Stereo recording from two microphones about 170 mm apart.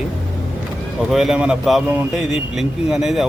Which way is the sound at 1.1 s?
Centre (ahead or behind).